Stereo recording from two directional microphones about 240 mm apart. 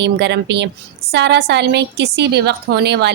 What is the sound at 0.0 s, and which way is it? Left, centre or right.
A woman's voice, right.